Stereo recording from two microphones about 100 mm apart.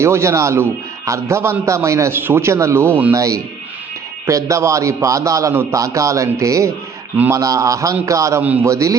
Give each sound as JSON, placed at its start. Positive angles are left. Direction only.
{"t": 0.0, "sound": "a man's voice", "side_deg": -25}
{"t": 3.2, "sound": "a man's voice", "side_deg": -35}
{"t": 8.4, "sound": "a man's voice", "side_deg": -15}
{"t": 8.6, "sound": "a man's voice", "side_deg": -30}